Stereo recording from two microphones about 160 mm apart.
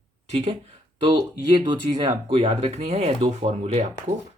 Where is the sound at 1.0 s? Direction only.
30° right (ahead or behind).